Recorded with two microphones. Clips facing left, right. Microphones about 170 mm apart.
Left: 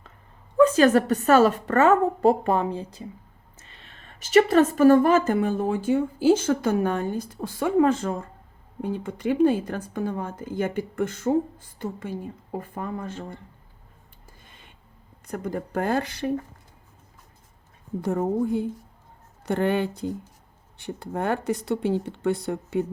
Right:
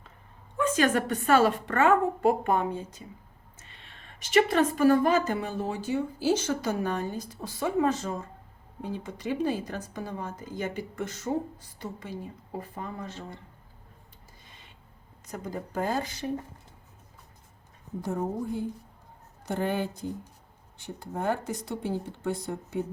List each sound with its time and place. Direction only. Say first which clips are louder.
0.5 s a woman's voice: left 8 dB; 40° left (ahead or behind)
15.3 s speech: left 6 dB; 55° left (ahead or behind)
19.5 s speech: left 6 dB; 70° left (ahead or behind)